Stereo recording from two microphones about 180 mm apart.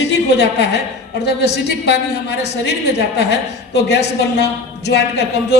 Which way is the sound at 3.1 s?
70° left (ahead or behind).